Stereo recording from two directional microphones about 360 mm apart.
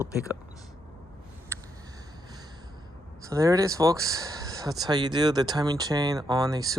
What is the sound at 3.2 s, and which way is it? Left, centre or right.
Speech, centre.